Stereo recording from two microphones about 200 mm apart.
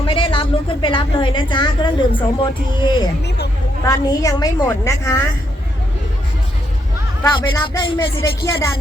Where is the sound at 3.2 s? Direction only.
55° left (ahead or behind).